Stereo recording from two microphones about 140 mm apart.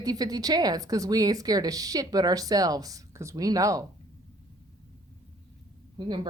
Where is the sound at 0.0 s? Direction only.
25° right (ahead or behind).